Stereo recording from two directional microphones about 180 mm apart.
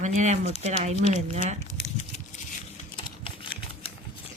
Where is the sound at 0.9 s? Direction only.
35° left (ahead or behind).